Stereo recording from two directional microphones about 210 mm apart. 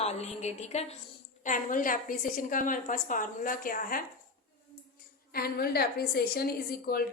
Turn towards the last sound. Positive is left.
turn(degrees=45)  # may be behind; listen again after turning